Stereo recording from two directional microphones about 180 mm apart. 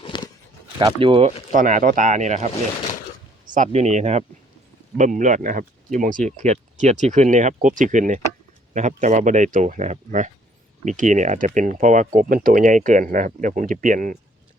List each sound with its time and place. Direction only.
0.0 s walk: 25° left (ahead or behind)
0.8 s speech: 30° right (ahead or behind)
1.5 s speech: 45° right (ahead or behind)
3.5 s speech: 40° right (ahead or behind)